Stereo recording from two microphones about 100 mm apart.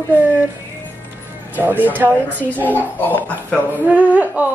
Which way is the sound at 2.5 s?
15° left (ahead or behind).